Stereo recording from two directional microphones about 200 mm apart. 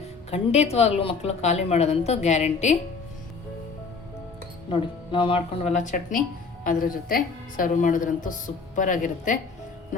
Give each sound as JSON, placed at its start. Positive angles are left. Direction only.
{"t": 0.3, "sound": "speech", "side_deg": 30}
{"t": 4.7, "sound": "speech", "side_deg": 25}